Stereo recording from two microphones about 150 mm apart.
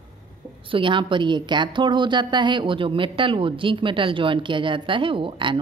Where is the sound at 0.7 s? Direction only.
35° right (ahead or behind).